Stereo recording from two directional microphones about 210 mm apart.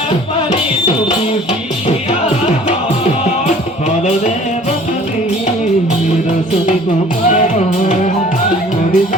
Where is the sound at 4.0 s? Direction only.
35° left (ahead or behind).